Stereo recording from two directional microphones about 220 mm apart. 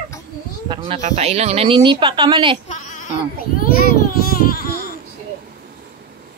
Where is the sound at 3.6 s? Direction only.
40° left (ahead or behind).